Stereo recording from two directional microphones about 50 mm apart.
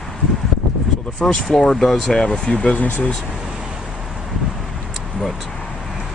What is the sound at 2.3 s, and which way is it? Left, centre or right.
Speech, left.